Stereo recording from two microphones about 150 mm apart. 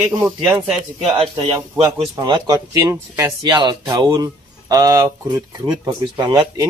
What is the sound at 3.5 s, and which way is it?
Speech, 30° right (ahead or behind).